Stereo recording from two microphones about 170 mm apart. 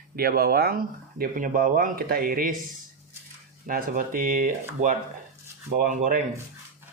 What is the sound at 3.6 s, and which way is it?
Speech, 55° right (ahead or behind).